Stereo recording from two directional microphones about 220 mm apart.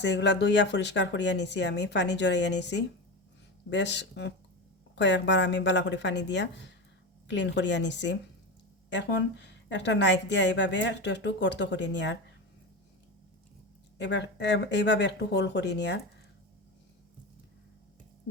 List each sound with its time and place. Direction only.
0.0 s a woman's voice: 50° left (ahead or behind)
14.0 s a woman's voice: 50° left (ahead or behind)